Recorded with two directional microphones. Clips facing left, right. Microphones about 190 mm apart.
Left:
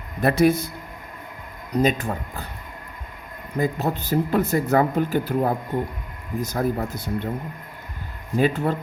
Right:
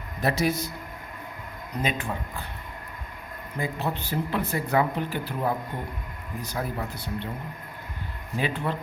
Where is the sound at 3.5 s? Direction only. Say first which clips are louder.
Left 6 dB; 40° left (ahead or behind).